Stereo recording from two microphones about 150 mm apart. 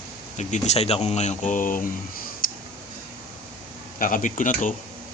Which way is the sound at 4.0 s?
65° left (ahead or behind).